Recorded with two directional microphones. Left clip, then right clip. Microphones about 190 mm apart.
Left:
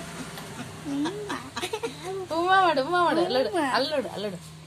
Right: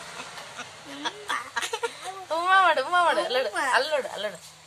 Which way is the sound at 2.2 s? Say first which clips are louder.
Right 1 dB; 35° right (ahead or behind).